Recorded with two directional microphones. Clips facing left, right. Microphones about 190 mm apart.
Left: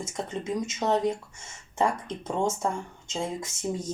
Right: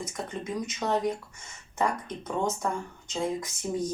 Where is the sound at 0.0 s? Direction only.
25° left (ahead or behind).